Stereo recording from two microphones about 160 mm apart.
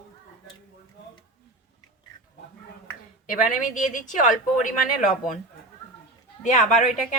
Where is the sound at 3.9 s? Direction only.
50° left (ahead or behind).